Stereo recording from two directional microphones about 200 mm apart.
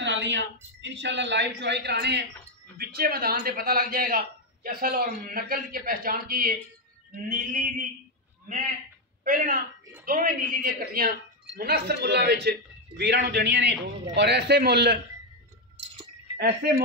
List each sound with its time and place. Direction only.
0.0 s a sound: 65° right (ahead or behind)
0.7 s a man's voice: 65° right (ahead or behind); by 7.6 s 40° right (ahead or behind)
9.2 s a man's voice: 45° right (ahead or behind)